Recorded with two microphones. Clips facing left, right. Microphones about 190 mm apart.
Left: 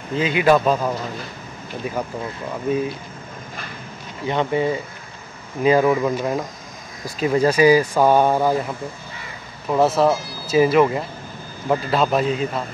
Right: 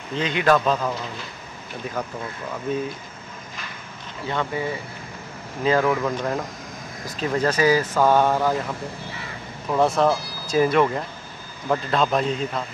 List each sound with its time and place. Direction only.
0.1 s speech: 5° left (ahead or behind)
4.3 s speech: 20° left (ahead or behind)
9.7 s speech: 5° left (ahead or behind)